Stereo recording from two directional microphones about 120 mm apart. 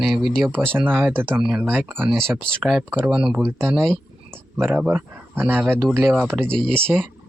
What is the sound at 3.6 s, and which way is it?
Speech, 20° right (ahead or behind).